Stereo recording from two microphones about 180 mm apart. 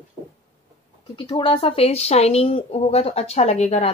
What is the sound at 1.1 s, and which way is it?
Speech, 25° left (ahead or behind).